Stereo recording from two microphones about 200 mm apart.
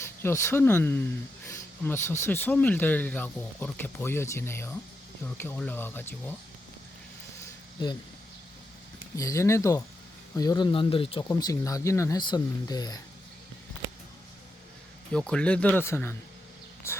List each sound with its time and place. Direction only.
0.0 s speech: 10° left (ahead or behind)
9.1 s speech: 15° left (ahead or behind)
15.1 s speech: 5° left (ahead or behind)